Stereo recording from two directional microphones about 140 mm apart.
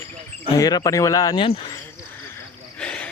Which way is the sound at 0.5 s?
25° left (ahead or behind).